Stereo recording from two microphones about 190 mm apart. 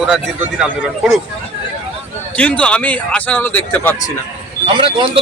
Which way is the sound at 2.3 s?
10° left (ahead or behind).